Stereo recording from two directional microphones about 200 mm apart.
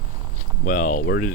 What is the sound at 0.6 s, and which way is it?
Speech, 40° left (ahead or behind).